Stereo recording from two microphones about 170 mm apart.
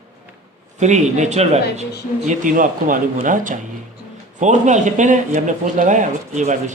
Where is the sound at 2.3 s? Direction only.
50° right (ahead or behind).